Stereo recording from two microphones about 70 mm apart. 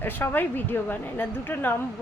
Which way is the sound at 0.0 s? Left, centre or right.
Left.